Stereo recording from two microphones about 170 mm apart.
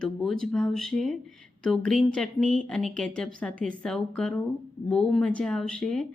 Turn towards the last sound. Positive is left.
turn(degrees=5)  # may be behind; listen again after turning